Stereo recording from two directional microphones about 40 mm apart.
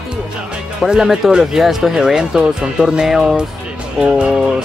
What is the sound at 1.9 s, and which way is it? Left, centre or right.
Speech, centre.